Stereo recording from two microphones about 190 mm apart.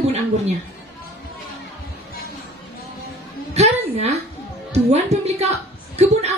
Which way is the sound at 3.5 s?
35° right (ahead or behind).